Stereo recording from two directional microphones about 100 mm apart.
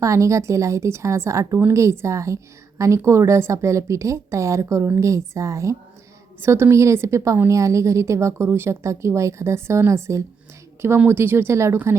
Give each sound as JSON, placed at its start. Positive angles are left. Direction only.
{"t": 0.0, "sound": "a woman's voice", "side_deg": -30}